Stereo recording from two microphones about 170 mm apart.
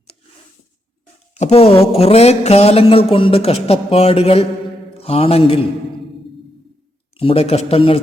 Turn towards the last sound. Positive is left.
turn(degrees=35)  # may be behind; listen again after turning